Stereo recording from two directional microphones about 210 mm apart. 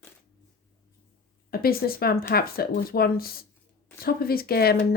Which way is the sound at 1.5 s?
45° left (ahead or behind).